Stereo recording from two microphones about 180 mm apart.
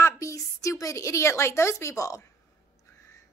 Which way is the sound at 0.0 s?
15° left (ahead or behind).